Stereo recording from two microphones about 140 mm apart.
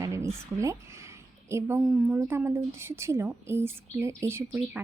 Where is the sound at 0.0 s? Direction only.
20° right (ahead or behind).